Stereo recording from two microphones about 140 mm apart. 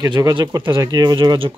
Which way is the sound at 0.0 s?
30° right (ahead or behind).